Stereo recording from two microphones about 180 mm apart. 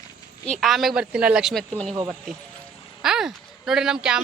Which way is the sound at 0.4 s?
Centre (ahead or behind).